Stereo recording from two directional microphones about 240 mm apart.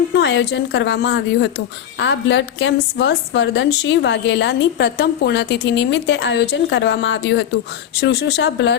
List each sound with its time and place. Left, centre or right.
0.1 s a woman's voice: left